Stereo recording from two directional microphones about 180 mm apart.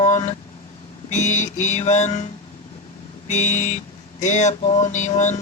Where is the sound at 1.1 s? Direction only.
40° left (ahead or behind).